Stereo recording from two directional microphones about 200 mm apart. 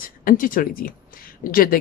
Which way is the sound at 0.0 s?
45° left (ahead or behind).